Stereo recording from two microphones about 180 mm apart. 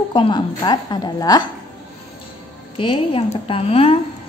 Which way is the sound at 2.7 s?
30° left (ahead or behind).